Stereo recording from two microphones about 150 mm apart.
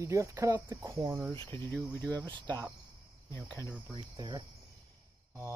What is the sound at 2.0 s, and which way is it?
Speech, 25° right (ahead or behind).